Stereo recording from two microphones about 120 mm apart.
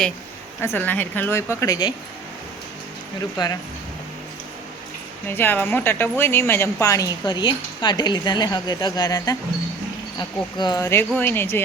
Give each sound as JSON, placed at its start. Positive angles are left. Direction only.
{"t": 0.6, "sound": "speech", "side_deg": 15}
{"t": 3.3, "sound": "speech", "side_deg": 35}
{"t": 5.3, "sound": "speech", "side_deg": 15}
{"t": 11.2, "sound": "speech", "side_deg": 20}